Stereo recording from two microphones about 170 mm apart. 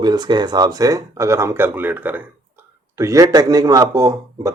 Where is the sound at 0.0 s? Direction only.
25° right (ahead or behind).